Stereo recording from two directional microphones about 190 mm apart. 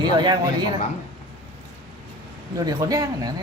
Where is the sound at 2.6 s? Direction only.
15° right (ahead or behind).